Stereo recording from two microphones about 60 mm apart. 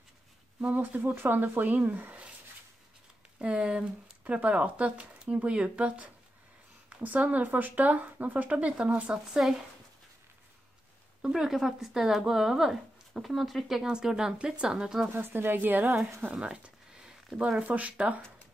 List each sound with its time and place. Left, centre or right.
0.6 s speech: right
3.3 s speech: centre
9.1 s speech: centre
11.2 s speech: centre
15.1 s a woman's voice: right
16.3 s a sound: centre
17.6 s speech: right